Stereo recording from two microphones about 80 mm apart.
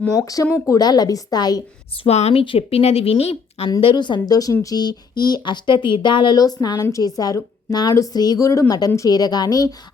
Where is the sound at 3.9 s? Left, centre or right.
Left.